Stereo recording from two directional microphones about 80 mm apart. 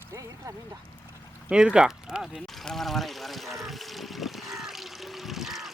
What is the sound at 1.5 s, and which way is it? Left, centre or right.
Speech, centre.